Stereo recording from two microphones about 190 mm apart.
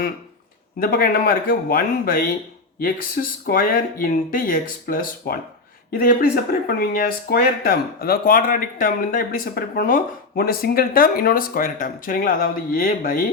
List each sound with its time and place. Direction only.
0.8 s speech: 50° left (ahead or behind)
6.7 s speech: 50° left (ahead or behind)